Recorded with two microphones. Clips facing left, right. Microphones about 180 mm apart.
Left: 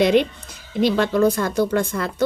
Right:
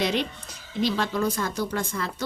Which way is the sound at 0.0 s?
60° left (ahead or behind).